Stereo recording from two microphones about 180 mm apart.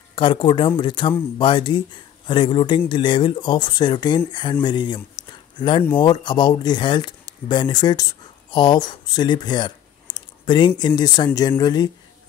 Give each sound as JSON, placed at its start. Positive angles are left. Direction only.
{"t": 0.1, "sound": "speech", "side_deg": 25}
{"t": 10.1, "sound": "a sound", "side_deg": 25}
{"t": 11.0, "sound": "speech", "side_deg": 25}